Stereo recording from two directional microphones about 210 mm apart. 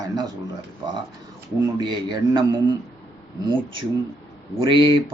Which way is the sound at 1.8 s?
20° right (ahead or behind).